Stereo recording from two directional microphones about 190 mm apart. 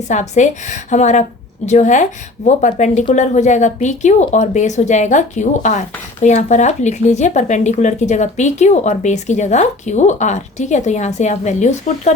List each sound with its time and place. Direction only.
0.1 s speech: 40° left (ahead or behind)